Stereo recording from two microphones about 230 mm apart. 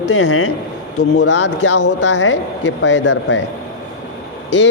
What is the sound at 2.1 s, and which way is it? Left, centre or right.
A woman's voice, left.